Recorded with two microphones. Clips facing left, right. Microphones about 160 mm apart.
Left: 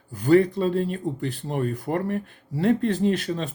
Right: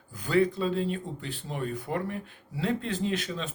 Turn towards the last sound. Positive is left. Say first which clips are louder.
# left 7 dB
turn(degrees=50)  # may be behind; listen again after turning